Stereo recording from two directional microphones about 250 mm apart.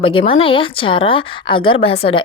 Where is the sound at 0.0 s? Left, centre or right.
Left.